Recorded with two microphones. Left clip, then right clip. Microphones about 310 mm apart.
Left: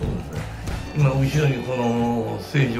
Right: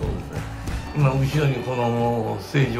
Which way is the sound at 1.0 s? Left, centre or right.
Centre.